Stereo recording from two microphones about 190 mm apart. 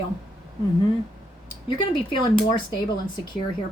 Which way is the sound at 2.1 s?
25° left (ahead or behind).